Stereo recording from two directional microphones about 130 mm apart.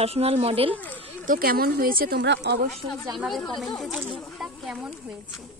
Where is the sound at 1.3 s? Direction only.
90° right.